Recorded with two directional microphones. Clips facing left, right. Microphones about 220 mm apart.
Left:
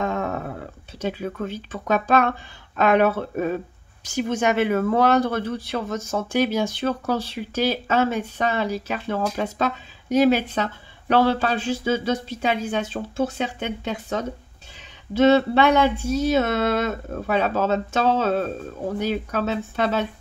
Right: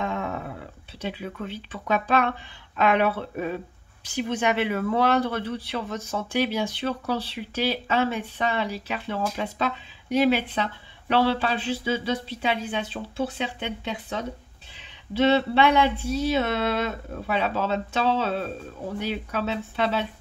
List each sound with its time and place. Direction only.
0.0 s speech: 45° left (ahead or behind)